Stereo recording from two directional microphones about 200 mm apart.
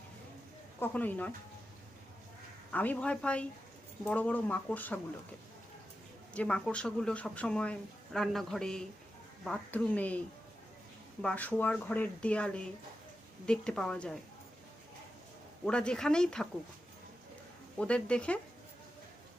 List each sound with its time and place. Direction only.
0.8 s speech: 10° left (ahead or behind)
2.7 s speech: 10° left (ahead or behind)
6.3 s speech: 5° left (ahead or behind)
11.2 s speech: 5° left (ahead or behind)
15.6 s speech: 5° left (ahead or behind)
17.7 s speech: 5° left (ahead or behind)